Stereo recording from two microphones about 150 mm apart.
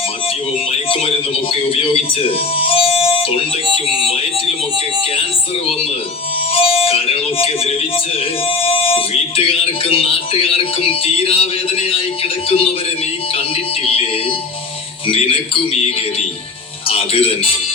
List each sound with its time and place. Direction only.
2.6 s music: 40° left (ahead or behind)
4.0 s speech: 40° left (ahead or behind)
6.5 s music: 40° left (ahead or behind)
8.6 s speech: 40° left (ahead or behind)
15.0 s speech: 40° left (ahead or behind)
16.9 s speech: 40° left (ahead or behind)